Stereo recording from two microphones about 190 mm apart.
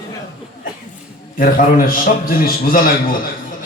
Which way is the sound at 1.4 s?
45° left (ahead or behind).